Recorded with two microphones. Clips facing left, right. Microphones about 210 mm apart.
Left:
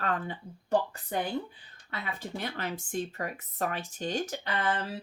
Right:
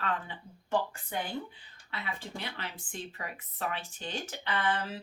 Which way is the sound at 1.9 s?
45° left (ahead or behind).